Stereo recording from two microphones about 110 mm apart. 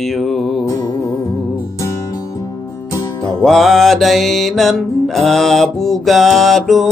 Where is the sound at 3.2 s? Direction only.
Centre (ahead or behind).